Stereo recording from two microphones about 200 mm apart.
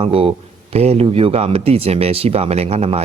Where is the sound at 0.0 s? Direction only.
30° right (ahead or behind).